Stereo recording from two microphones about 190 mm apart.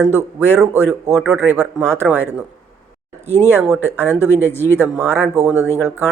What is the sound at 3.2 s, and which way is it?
Speech, 15° left (ahead or behind).